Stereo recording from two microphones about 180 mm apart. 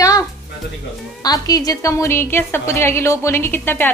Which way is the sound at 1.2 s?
20° left (ahead or behind).